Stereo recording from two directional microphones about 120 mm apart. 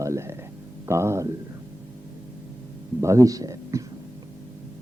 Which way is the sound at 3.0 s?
25° right (ahead or behind).